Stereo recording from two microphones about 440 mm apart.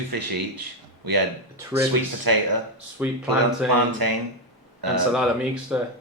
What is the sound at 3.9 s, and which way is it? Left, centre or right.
Speech, right.